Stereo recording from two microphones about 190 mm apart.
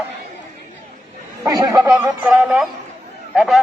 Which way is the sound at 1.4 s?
20° right (ahead or behind).